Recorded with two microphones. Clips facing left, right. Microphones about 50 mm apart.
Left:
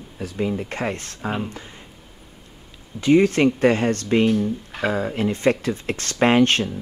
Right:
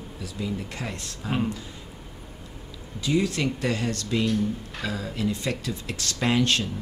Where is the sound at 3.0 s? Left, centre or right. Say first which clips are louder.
Left 9 dB; left.